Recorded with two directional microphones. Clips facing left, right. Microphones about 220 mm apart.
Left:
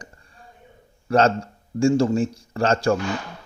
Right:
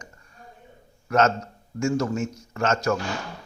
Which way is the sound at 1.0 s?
30° left (ahead or behind).